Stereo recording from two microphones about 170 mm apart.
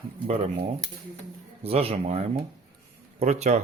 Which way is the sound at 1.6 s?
35° right (ahead or behind).